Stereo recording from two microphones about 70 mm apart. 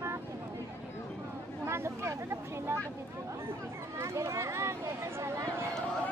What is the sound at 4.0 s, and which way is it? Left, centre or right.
Speech, right.